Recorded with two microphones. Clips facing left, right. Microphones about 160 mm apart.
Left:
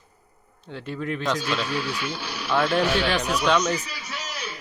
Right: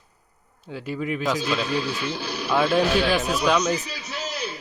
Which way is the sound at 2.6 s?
10° right (ahead or behind).